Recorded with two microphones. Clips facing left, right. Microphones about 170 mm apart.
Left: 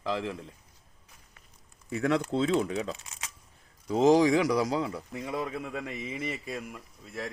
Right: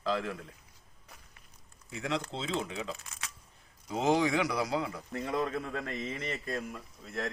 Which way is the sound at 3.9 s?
35° left (ahead or behind).